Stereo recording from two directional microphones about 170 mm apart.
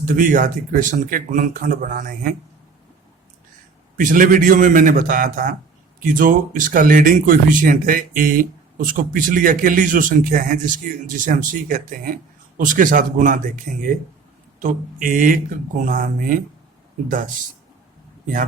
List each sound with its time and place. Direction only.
0.0 s speech: 50° right (ahead or behind)
3.9 s speech: 55° right (ahead or behind)